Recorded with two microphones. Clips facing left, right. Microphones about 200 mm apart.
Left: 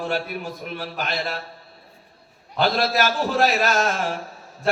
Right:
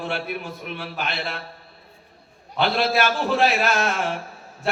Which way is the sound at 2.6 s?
40° left (ahead or behind).